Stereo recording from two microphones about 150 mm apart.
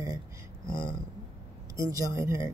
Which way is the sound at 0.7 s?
30° left (ahead or behind).